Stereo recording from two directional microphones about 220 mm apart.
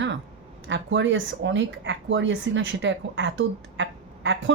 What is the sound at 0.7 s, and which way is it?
Speech, 55° right (ahead or behind).